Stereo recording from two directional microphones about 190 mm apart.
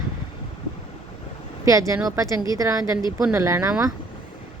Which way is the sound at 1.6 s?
15° right (ahead or behind).